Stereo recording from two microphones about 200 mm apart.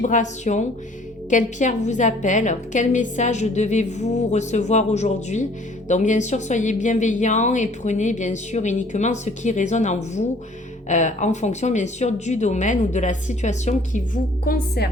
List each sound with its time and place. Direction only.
0.0 s a woman's voice: 40° left (ahead or behind)
14.4 s a woman's voice: 50° left (ahead or behind)